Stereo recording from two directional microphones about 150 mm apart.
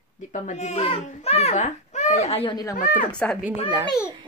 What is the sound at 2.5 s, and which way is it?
Speech, 25° left (ahead or behind).